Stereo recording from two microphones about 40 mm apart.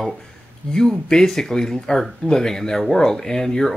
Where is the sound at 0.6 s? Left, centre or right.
Left.